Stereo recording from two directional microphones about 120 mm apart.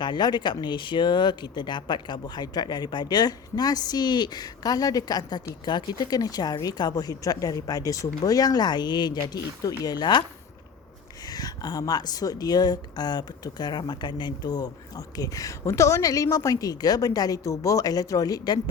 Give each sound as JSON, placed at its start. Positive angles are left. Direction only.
{"t": 0.0, "sound": "speech", "side_deg": 40}
{"t": 11.3, "sound": "speech", "side_deg": 35}